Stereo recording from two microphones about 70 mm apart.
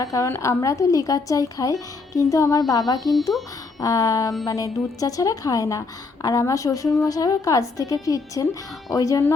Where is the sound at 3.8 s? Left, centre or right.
Left.